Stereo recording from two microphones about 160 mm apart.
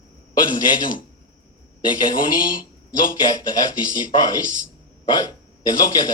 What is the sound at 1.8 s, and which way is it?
Speech, 25° left (ahead or behind).